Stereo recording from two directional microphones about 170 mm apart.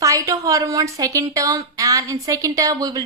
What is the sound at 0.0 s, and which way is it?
A woman's voice, 20° right (ahead or behind).